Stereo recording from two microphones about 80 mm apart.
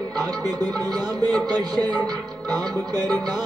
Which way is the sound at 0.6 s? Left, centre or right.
Right.